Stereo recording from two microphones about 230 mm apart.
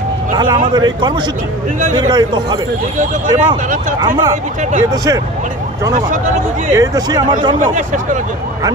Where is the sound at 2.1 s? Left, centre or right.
Centre.